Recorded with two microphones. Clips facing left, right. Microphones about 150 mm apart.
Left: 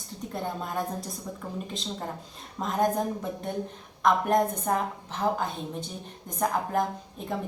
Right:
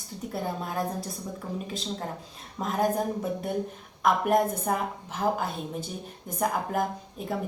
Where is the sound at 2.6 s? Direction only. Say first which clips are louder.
Left 1 dB; 5° right (ahead or behind).